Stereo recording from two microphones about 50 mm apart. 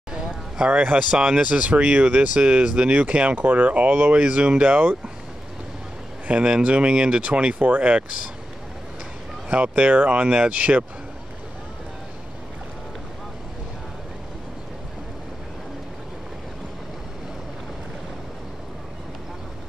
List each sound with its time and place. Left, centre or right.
0.1 s a sound: centre
0.7 s speech: right
0.9 s speech: centre
1.4 s speech: right
2.0 s speech: right
2.3 s speech: right
6.2 s speech: right
7.2 s speech: right
9.5 s speech: right